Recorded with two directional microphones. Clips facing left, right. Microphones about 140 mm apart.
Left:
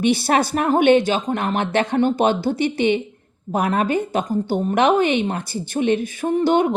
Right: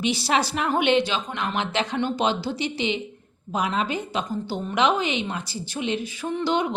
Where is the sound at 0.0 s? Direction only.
55° left (ahead or behind).